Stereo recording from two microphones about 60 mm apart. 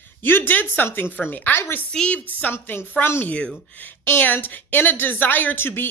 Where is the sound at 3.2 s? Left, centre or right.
Centre.